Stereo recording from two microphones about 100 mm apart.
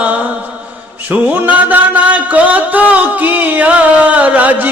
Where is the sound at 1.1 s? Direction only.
15° right (ahead or behind).